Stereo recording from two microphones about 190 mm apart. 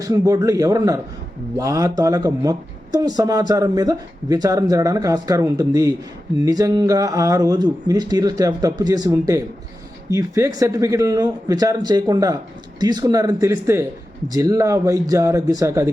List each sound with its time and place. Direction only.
0.0 s speech: 20° right (ahead or behind)